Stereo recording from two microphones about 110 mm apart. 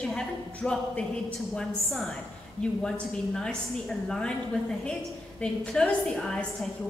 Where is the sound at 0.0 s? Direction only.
10° left (ahead or behind).